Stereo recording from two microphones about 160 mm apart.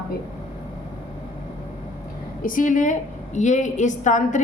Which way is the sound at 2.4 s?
60° left (ahead or behind).